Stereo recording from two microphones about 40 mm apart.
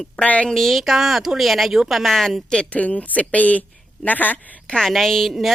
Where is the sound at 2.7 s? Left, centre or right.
Left.